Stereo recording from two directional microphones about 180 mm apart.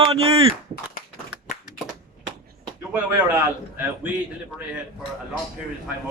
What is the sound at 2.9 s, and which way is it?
Speech, 10° right (ahead or behind).